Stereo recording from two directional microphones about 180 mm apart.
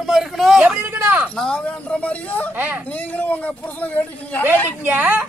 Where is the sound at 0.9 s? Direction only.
10° right (ahead or behind).